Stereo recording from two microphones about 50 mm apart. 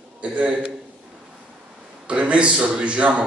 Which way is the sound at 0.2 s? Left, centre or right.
Right.